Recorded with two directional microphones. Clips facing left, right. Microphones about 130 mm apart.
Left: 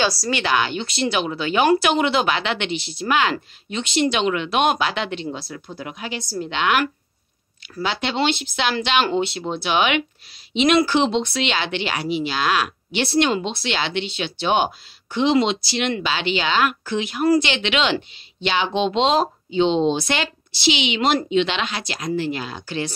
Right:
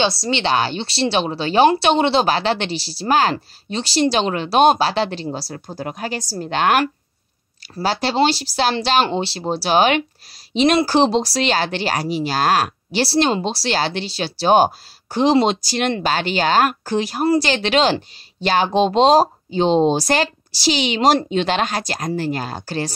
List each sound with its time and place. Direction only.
0.0 s a woman's voice: 25° right (ahead or behind); by 22.9 s 40° right (ahead or behind)